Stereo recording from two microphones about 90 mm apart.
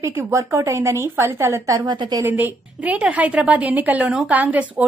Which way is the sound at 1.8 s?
55° right (ahead or behind).